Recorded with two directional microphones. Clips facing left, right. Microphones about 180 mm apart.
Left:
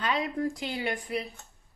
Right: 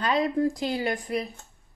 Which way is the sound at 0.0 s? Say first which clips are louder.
Right 5 dB; 35° right (ahead or behind).